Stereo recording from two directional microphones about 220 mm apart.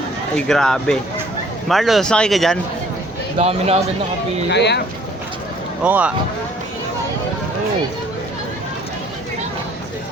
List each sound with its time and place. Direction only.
0.3 s speech: centre (ahead or behind)
3.3 s speech: 30° right (ahead or behind)
4.4 s speech: 50° left (ahead or behind)
5.8 s speech: 5° right (ahead or behind)